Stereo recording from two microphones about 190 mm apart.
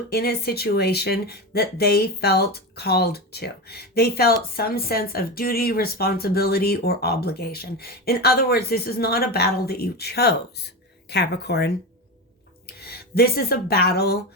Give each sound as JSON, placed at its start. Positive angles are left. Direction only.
{"t": 0.1, "sound": "speech", "side_deg": 55}